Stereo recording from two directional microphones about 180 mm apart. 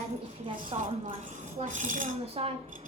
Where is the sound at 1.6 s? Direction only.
45° right (ahead or behind).